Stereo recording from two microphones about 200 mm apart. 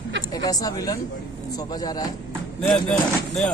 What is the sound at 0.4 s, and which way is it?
Speech, 20° left (ahead or behind).